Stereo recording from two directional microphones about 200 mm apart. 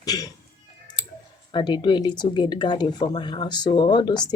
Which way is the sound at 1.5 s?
25° left (ahead or behind).